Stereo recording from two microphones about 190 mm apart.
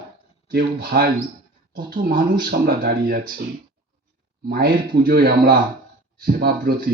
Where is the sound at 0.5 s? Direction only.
55° right (ahead or behind).